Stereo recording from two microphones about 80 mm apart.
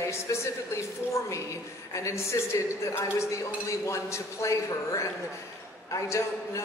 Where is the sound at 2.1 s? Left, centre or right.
Left.